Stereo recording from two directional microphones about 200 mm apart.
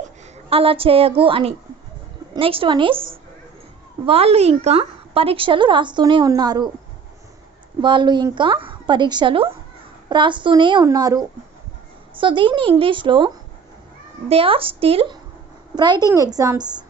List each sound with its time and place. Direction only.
0.5 s a woman's voice: 25° right (ahead or behind)
7.8 s a woman's voice: 25° right (ahead or behind)